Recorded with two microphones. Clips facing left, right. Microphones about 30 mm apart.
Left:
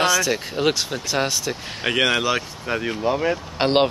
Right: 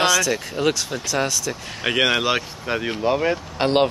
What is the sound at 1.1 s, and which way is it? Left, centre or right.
Speech, left.